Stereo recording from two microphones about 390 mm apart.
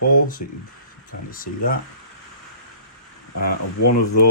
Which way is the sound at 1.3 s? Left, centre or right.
Left.